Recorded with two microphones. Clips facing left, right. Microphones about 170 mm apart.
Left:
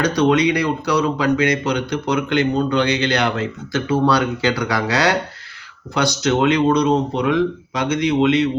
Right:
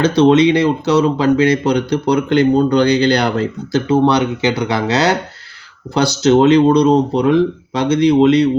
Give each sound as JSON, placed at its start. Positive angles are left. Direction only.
{"t": 0.2, "sound": "speech", "side_deg": -25}